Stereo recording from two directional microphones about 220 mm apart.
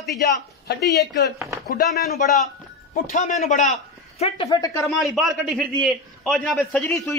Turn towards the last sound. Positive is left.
turn(degrees=5)  # may be behind; listen again after turning